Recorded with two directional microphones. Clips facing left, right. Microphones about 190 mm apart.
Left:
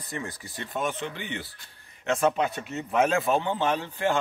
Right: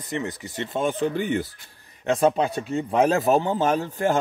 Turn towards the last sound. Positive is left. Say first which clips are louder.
# right 4 dB
turn(degrees=-40)  # may be behind; listen again after turning